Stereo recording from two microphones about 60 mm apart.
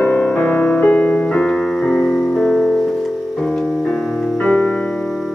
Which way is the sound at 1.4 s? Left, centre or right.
Centre.